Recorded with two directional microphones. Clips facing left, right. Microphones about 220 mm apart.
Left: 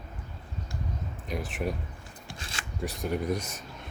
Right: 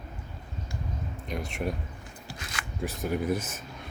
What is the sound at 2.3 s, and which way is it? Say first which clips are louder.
Shuffling cards: right 1 dB; 30° left (ahead or behind).